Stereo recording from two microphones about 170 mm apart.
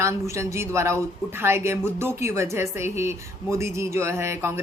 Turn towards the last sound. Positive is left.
turn(degrees=-15)  # may be behind; listen again after turning